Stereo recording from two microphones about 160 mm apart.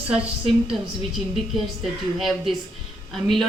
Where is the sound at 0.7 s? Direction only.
Centre (ahead or behind).